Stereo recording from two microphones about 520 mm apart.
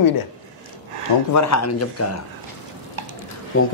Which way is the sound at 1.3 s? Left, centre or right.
Left.